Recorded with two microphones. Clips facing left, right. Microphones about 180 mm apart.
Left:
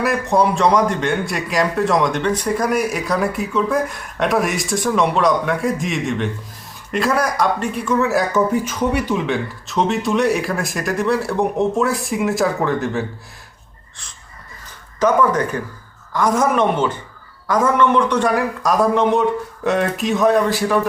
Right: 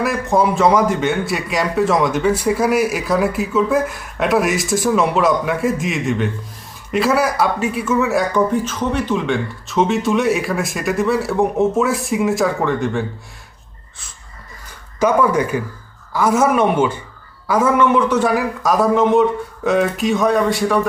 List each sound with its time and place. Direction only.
0.0 s a man's voice: centre (ahead or behind)
14.9 s a man's voice: 10° right (ahead or behind)